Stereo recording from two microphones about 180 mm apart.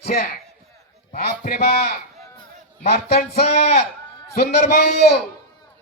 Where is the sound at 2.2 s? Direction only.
20° left (ahead or behind).